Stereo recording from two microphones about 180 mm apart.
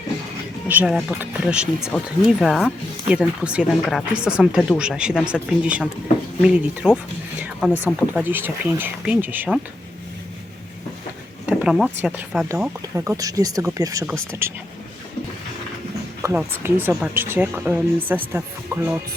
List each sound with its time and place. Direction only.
0.7 s speech: 5° right (ahead or behind)
7.4 s a sound: 5° right (ahead or behind)
7.9 s speech: 5° right (ahead or behind)
11.4 s a sound: 5° right (ahead or behind)
12.0 s speech: 5° right (ahead or behind)
16.2 s speech: 15° right (ahead or behind)